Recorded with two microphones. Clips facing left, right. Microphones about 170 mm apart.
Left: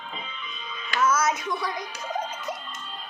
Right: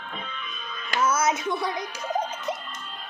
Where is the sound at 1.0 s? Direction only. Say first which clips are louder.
Even; 25° right (ahead or behind).